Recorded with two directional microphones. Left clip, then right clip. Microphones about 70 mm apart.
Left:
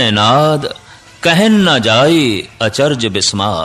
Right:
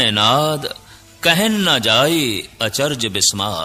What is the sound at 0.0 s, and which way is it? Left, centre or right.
Speech, right.